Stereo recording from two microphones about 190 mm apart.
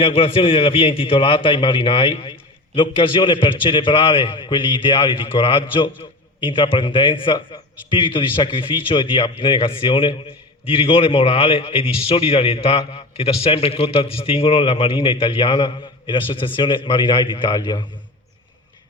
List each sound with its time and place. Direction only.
0.0 s a man's voice: 30° left (ahead or behind)